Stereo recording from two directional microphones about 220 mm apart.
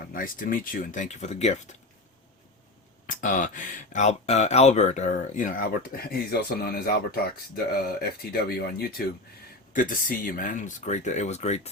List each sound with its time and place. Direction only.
0.1 s speech: 40° left (ahead or behind)
3.1 s speech: 35° left (ahead or behind)